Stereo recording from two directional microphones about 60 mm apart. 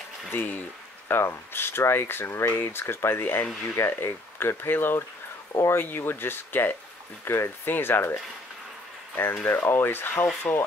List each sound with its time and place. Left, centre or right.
0.3 s speech: left